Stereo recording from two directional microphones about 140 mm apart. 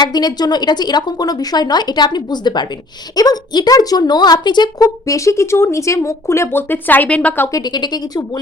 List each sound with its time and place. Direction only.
0.0 s a woman's voice: 30° left (ahead or behind)
7.6 s speech: 30° left (ahead or behind)